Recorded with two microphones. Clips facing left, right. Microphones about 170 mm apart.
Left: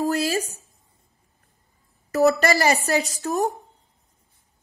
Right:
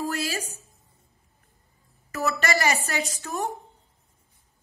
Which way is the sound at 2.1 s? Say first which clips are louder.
Left 8 dB; 40° left (ahead or behind).